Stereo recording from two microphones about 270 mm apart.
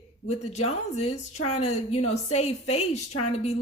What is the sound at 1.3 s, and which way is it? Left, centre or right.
Speech, left.